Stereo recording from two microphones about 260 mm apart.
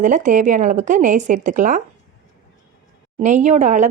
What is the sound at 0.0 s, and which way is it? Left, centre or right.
Speech, right.